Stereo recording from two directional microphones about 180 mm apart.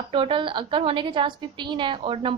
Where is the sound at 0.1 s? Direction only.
30° right (ahead or behind).